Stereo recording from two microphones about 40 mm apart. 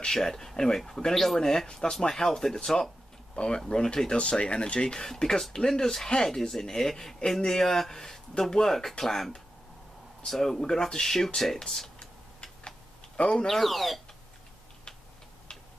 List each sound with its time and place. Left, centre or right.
0.0 s speech: centre
12.0 s tick-tock: left
13.5 s speech: centre